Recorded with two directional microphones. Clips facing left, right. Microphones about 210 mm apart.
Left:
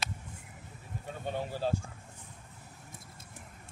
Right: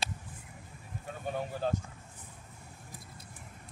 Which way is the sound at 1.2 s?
Centre (ahead or behind).